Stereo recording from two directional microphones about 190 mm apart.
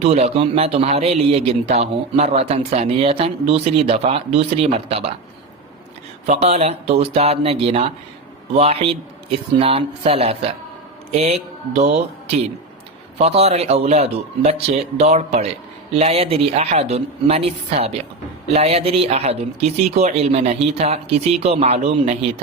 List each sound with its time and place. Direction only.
0.0 s a man's voice: 35° right (ahead or behind)
6.2 s a man's voice: 35° right (ahead or behind)